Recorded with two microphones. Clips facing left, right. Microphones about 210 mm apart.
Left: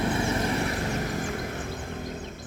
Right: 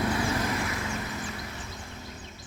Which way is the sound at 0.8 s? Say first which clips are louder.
Left 5 dB; 45° left (ahead or behind).